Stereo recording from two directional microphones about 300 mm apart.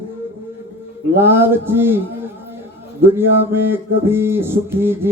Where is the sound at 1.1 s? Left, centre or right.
Centre.